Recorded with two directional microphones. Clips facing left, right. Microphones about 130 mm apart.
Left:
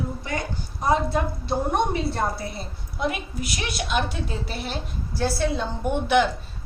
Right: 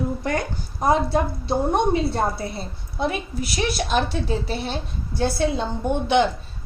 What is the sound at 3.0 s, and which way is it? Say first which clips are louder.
A woman's voice: right 2 dB; 35° right (ahead or behind).